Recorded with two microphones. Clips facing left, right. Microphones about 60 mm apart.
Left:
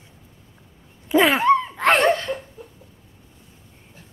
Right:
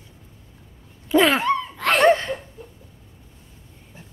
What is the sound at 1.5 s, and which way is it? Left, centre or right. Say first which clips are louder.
Laughter: left 4 dB; left.